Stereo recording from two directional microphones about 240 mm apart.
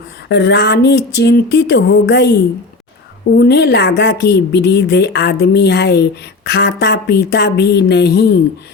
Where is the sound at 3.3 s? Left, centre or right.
Left.